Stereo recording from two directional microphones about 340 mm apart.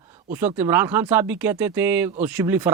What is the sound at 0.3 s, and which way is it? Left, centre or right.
Speech, centre.